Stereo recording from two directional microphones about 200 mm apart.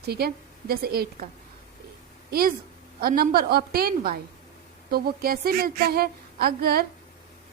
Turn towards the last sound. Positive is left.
turn(degrees=-50)  # may be behind; listen again after turning